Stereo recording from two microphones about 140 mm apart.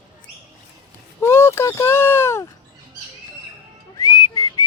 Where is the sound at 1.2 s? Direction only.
15° left (ahead or behind).